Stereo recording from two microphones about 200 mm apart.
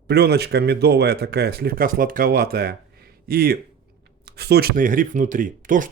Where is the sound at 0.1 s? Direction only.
55° right (ahead or behind).